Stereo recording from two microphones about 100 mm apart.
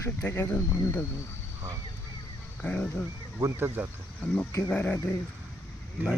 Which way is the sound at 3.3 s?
25° right (ahead or behind).